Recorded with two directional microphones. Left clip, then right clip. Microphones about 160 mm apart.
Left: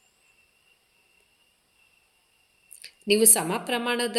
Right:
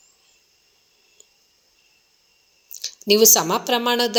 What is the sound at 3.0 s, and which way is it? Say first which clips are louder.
A woman's voice: right 7 dB; 20° right (ahead or behind).